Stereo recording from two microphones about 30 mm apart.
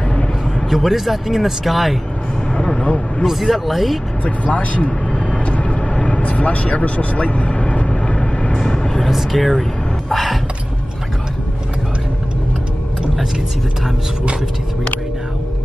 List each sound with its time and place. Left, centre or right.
0.7 s speech: centre
2.5 s vehicle: left
2.8 s a man's voice: left
3.3 s speech: centre
4.2 s speech: left
5.4 s vehicle: left
6.2 s speech: left
8.7 s vehicle: centre
9.1 s speech: centre